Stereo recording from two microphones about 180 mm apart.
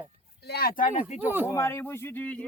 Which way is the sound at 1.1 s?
10° right (ahead or behind).